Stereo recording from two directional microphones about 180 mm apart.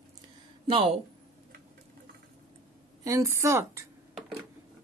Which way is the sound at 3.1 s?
15° right (ahead or behind).